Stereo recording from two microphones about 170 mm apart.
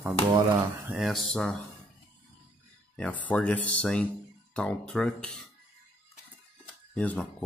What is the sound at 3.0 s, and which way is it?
Speech, 10° left (ahead or behind).